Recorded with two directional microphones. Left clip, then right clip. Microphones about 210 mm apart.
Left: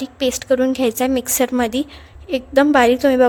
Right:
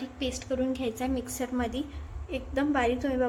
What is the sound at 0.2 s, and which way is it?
A woman's voice, 45° left (ahead or behind).